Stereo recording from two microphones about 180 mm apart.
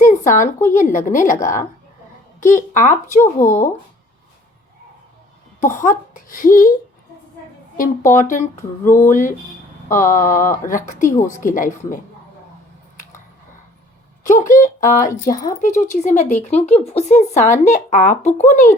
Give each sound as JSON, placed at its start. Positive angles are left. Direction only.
{"t": 0.0, "sound": "a sound", "side_deg": 45}
{"t": 0.7, "sound": "speech", "side_deg": 45}
{"t": 5.5, "sound": "speech", "side_deg": 45}
{"t": 7.8, "sound": "speech", "side_deg": 45}
{"t": 14.3, "sound": "speech", "side_deg": 45}
{"t": 15.2, "sound": "speech", "side_deg": 20}
{"t": 15.6, "sound": "speech", "side_deg": 45}